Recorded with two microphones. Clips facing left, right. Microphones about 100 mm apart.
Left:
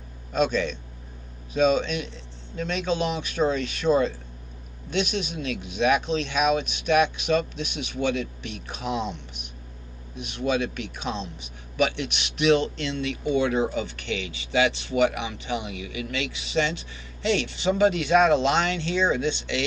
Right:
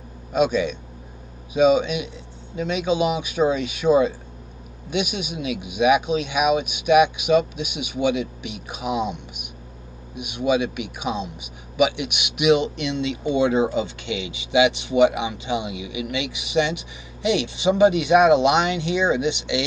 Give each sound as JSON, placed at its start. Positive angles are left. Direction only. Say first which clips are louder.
{"t": 0.3, "sound": "a man's voice", "louder": "right 4 dB", "side_deg": -10}